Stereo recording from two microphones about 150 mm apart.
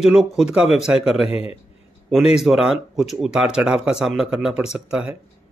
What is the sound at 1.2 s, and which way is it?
Speech, 40° left (ahead or behind).